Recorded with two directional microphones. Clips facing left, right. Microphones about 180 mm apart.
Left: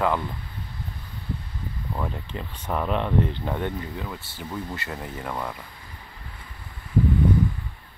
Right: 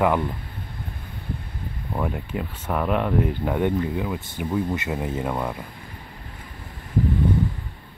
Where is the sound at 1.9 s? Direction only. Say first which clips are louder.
Right 5 dB; 10° right (ahead or behind).